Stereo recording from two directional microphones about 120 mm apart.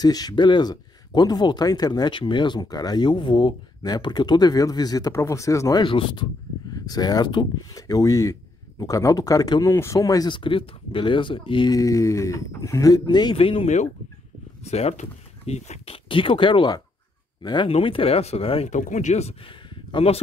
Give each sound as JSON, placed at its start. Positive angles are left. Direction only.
{"t": 0.0, "sound": "speech", "side_deg": 30}
{"t": 5.9, "sound": "speech", "side_deg": 45}
{"t": 6.7, "sound": "speech", "side_deg": 30}
{"t": 13.4, "sound": "speech", "side_deg": 50}
{"t": 14.6, "sound": "speech", "side_deg": 65}
{"t": 17.6, "sound": "speech", "side_deg": 50}
{"t": 18.7, "sound": "speech", "side_deg": 90}
{"t": 19.7, "sound": "a sound", "side_deg": 50}